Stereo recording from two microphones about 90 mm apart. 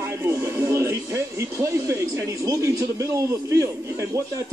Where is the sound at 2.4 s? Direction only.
35° right (ahead or behind).